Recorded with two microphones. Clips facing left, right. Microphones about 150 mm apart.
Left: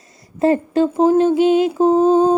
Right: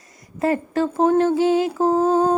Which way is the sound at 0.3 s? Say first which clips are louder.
Left 5 dB; 25° left (ahead or behind).